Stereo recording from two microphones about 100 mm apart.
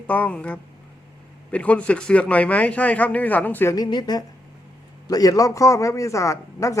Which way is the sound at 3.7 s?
45° left (ahead or behind).